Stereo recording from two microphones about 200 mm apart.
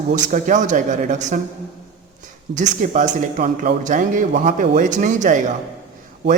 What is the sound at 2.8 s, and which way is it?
A man's voice, 40° right (ahead or behind).